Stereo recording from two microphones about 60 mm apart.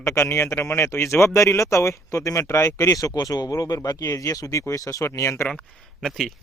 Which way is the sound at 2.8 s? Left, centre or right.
Left.